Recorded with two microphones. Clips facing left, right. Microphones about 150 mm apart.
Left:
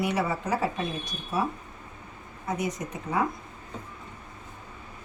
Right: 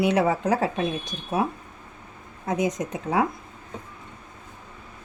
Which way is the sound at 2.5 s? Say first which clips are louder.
Right 5 dB; 90° right.